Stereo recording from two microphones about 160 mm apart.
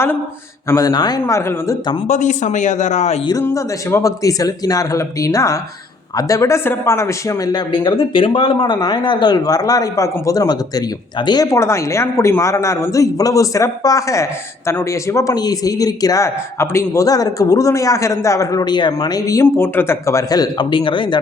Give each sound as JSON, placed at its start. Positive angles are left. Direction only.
{"t": 0.7, "sound": "a man's voice", "side_deg": 20}
{"t": 2.0, "sound": "speech", "side_deg": 50}
{"t": 3.2, "sound": "a man's voice", "side_deg": 20}